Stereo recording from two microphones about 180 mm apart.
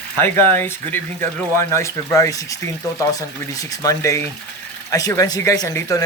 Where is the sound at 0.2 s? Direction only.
10° left (ahead or behind).